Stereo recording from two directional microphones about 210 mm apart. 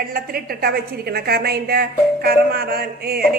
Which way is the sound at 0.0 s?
45° right (ahead or behind).